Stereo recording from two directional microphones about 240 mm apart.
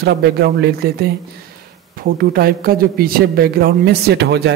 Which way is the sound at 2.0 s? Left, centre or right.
Right.